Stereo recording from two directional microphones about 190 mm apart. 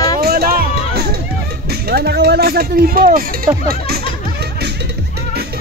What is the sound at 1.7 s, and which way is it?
Speech, 55° right (ahead or behind).